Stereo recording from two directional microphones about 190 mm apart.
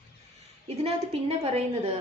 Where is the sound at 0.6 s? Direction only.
30° right (ahead or behind).